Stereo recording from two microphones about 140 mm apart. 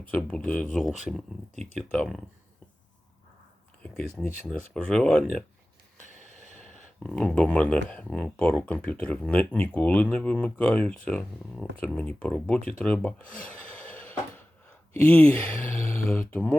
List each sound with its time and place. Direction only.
0.1 s speech: 10° left (ahead or behind)
1.9 s speech: 5° left (ahead or behind)
3.8 s speech: 5° left (ahead or behind)
6.1 s a sound: 55° right (ahead or behind)
7.0 s speech: 5° left (ahead or behind)
12.8 s a sound: 10° left (ahead or behind)
15.0 s speech: 10° left (ahead or behind)